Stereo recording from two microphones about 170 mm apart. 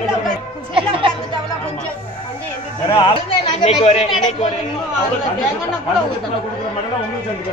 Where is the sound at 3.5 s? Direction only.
40° left (ahead or behind).